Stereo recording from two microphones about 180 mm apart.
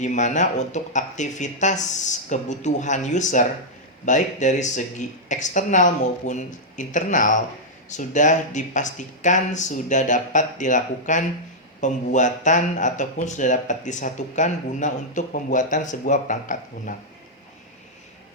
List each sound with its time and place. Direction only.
0.0 s a man's voice: 40° left (ahead or behind)